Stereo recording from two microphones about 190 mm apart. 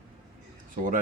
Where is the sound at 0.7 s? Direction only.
45° right (ahead or behind).